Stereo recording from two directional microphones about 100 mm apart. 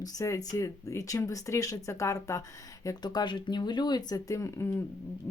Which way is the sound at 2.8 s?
40° left (ahead or behind).